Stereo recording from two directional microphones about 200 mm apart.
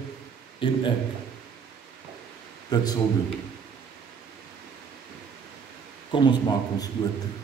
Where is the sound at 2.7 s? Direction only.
20° left (ahead or behind).